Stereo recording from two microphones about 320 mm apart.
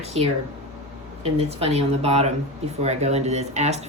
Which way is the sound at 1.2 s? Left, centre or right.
Centre.